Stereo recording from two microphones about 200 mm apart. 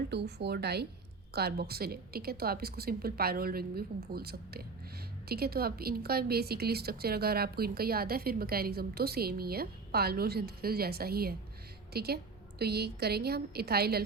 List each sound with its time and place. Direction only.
0.1 s speech: 55° right (ahead or behind)